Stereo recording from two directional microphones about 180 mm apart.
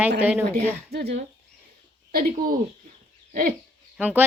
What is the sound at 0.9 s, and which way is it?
Speech, 65° right (ahead or behind).